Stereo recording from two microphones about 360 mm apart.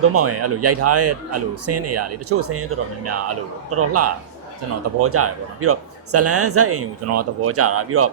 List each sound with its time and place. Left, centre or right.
0.0 s a man's voice: right